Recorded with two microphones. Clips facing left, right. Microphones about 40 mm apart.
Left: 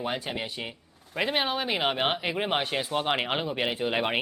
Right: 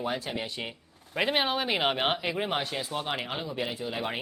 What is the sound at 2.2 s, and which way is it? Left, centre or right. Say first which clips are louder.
Speech: left 2 dB; centre.